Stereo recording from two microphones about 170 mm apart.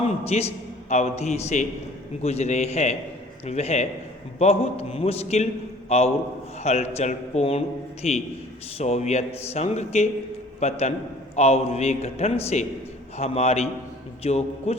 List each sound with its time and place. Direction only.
0.3 s a man's voice: 40° left (ahead or behind)